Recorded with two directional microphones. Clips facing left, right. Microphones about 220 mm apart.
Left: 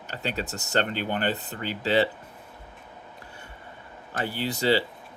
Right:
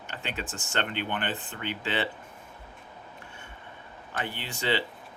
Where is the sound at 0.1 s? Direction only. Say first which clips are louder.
Left 5 dB; 40° left (ahead or behind).